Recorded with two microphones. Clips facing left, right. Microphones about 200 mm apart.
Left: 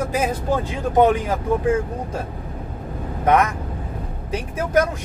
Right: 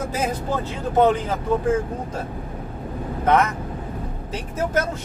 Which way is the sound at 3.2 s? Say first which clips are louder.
Left 1 dB; 15° left (ahead or behind).